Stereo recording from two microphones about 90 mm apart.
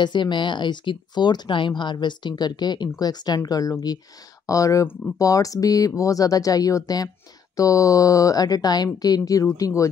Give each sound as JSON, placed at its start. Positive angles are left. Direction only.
{"t": 0.0, "sound": "speech", "side_deg": 60}